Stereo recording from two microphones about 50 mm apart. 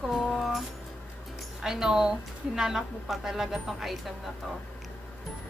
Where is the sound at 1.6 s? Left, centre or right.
Centre.